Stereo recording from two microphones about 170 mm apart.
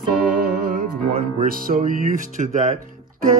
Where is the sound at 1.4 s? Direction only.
55° right (ahead or behind).